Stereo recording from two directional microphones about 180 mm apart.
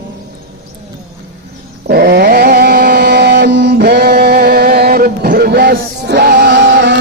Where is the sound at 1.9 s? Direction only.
60° right (ahead or behind).